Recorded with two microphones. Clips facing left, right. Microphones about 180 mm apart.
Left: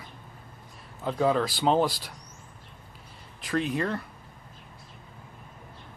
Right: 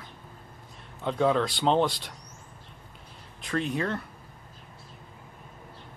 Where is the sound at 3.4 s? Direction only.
Centre (ahead or behind).